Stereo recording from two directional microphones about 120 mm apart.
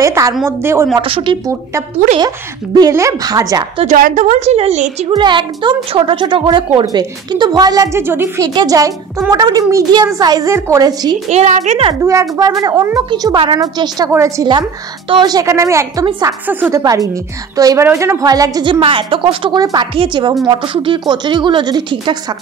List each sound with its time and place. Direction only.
0.0 s speech: 25° right (ahead or behind)
1.0 s speech: 45° right (ahead or behind)
2.1 s a woman's voice: 35° right (ahead or behind)
3.8 s a woman's voice: 80° right
5.1 s a woman's voice: 40° right (ahead or behind)
11.2 s a woman's voice: 70° right (ahead or behind)
11.9 s speech: 25° right (ahead or behind)
13.1 s a woman's voice: 40° right (ahead or behind); by 14.5 s 25° right (ahead or behind)
15.0 s a woman's voice: 35° right (ahead or behind); by 16.7 s 15° right (ahead or behind)
16.7 s speech: 30° right (ahead or behind)
18.7 s a woman's voice: 45° right (ahead or behind)